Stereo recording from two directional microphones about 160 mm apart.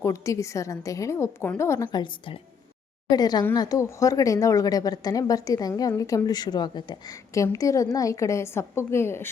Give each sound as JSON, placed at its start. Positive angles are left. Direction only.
{"t": 0.0, "sound": "a woman's voice", "side_deg": 20}